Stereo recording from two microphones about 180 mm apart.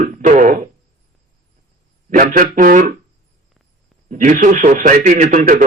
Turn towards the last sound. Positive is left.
turn(degrees=-50)  # may be behind; listen again after turning